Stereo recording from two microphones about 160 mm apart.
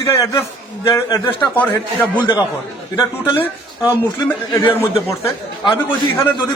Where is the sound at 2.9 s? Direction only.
30° left (ahead or behind).